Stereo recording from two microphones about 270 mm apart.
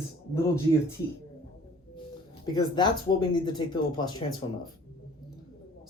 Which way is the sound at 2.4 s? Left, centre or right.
Centre.